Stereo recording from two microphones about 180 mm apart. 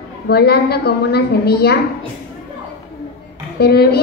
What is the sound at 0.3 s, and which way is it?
A woman's voice, 60° left (ahead or behind).